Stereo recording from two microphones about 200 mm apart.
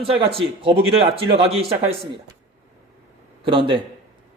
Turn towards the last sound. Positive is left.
turn(degrees=-25)  # may be behind; listen again after turning